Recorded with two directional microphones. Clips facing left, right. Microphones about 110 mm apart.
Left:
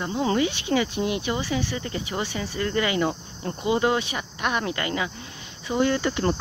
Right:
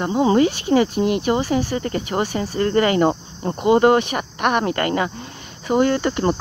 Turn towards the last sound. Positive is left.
turn(degrees=-45)  # may be behind; listen again after turning